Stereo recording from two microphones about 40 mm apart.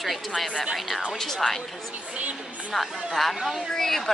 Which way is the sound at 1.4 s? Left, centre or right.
Centre.